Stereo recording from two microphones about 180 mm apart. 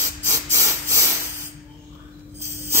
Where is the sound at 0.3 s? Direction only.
15° right (ahead or behind).